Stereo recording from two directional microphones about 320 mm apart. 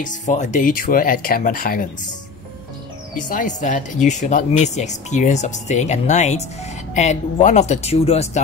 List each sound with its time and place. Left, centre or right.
0.0 s speech: left
3.2 s speech: left